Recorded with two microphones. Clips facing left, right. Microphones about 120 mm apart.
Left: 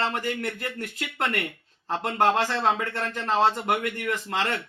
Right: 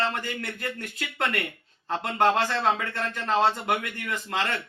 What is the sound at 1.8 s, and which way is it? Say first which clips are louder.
Speech: even; 20° left (ahead or behind).